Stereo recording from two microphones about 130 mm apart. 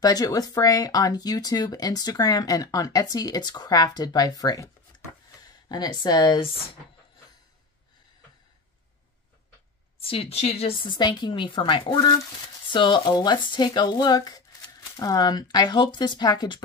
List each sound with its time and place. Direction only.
0.0 s speech: 30° left (ahead or behind)
5.7 s speech: 30° left (ahead or behind)
10.0 s speech: 45° left (ahead or behind)
10.9 s speech: 35° left (ahead or behind)